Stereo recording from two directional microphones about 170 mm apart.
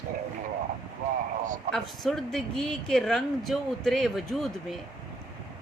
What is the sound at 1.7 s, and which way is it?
A woman's voice, centre (ahead or behind).